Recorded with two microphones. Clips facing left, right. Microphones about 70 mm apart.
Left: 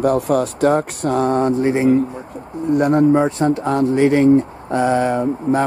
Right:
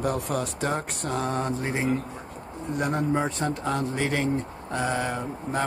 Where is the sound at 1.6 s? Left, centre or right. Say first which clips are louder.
Left 12 dB; centre.